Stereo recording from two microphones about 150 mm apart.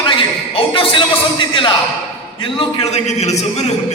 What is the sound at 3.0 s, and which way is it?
Speech, 45° left (ahead or behind).